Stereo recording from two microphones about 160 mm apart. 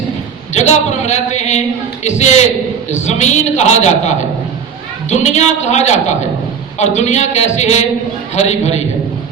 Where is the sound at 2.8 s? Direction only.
45° left (ahead or behind).